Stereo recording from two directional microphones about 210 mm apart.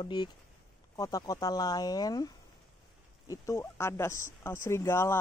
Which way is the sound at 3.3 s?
15° left (ahead or behind).